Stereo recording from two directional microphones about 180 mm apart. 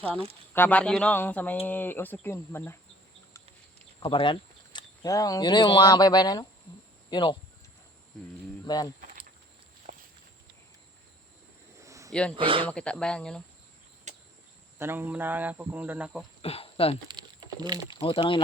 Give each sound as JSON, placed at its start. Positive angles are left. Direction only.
{"t": 0.5, "sound": "speech", "side_deg": 10}
{"t": 4.0, "sound": "speech", "side_deg": 25}
{"t": 8.6, "sound": "speech", "side_deg": 20}
{"t": 11.8, "sound": "a sound", "side_deg": -15}
{"t": 12.4, "sound": "speech", "side_deg": -30}
{"t": 12.6, "sound": "speech", "side_deg": 5}
{"t": 14.1, "sound": "cricket", "side_deg": -40}
{"t": 14.8, "sound": "speech", "side_deg": -10}
{"t": 16.4, "sound": "speech", "side_deg": 30}
{"t": 17.1, "sound": "a sound", "side_deg": -25}
{"t": 18.0, "sound": "speech", "side_deg": 30}